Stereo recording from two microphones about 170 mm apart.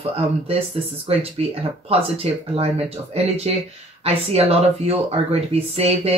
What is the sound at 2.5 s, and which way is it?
Speech, 35° right (ahead or behind).